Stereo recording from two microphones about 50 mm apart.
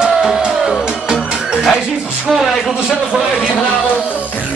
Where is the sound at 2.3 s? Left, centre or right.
Centre.